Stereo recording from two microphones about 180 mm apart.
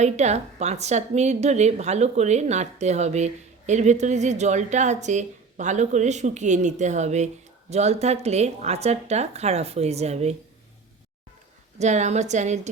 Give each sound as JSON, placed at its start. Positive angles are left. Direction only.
{"t": 0.0, "sound": "a woman's voice", "side_deg": -40}
{"t": 11.8, "sound": "a woman's voice", "side_deg": -40}